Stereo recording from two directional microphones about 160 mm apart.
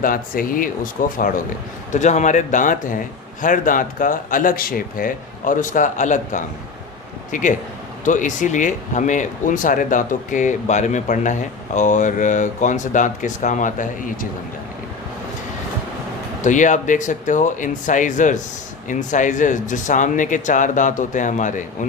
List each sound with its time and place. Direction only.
0.0 s speech: 60° left (ahead or behind)
1.9 s speech: 45° left (ahead or behind)
16.4 s speech: 50° left (ahead or behind)